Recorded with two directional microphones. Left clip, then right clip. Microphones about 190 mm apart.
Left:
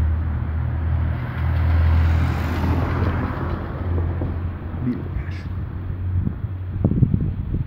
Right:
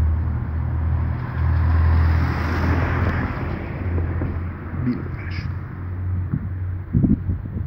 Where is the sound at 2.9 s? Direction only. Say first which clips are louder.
Right 1 dB; 45° left (ahead or behind).